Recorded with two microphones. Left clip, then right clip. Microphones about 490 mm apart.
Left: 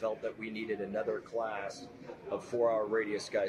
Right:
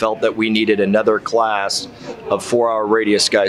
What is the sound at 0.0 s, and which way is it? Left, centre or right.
Speech, right.